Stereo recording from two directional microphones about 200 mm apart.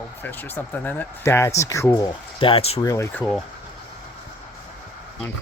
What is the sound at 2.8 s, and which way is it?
Speech, 15° left (ahead or behind).